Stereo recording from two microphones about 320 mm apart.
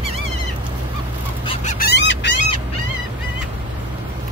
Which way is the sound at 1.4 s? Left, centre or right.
Left.